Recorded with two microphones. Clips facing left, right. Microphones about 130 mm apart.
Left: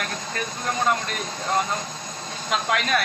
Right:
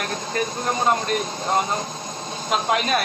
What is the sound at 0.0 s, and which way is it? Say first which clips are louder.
Speech: right 5 dB; 25° right (ahead or behind).